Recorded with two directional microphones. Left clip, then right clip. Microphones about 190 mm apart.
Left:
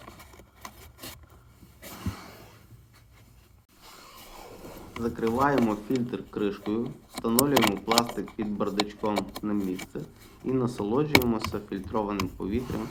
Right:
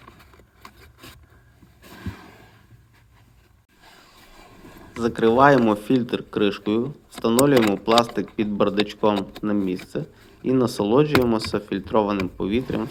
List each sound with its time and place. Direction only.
4.9 s speech: 30° right (ahead or behind)